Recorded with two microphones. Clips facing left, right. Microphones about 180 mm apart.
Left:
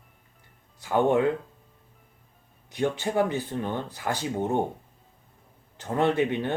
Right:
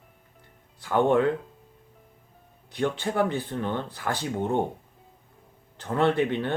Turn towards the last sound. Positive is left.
turn(degrees=15)  # may be behind; listen again after turning